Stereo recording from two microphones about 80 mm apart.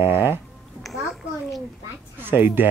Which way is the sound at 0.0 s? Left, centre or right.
Right.